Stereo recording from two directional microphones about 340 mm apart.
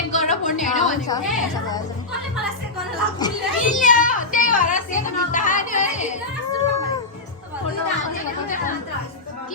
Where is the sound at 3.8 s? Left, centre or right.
Left.